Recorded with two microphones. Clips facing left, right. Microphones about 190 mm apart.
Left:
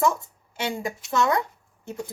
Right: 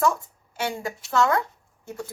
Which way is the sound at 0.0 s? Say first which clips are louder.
Even; 20° left (ahead or behind).